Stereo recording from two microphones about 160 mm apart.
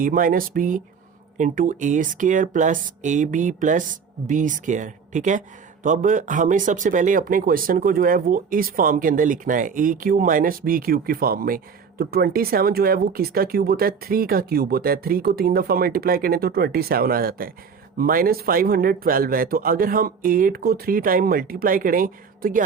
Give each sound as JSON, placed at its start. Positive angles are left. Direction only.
{"t": 0.0, "sound": "speech", "side_deg": -60}